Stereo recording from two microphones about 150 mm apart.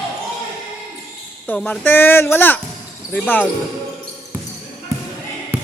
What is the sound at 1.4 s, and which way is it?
Speech, 10° left (ahead or behind).